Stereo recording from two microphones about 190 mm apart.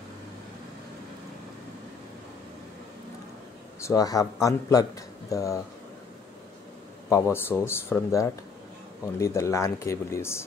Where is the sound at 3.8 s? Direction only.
20° left (ahead or behind).